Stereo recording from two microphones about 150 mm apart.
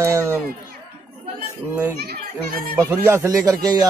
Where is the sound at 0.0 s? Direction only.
20° right (ahead or behind).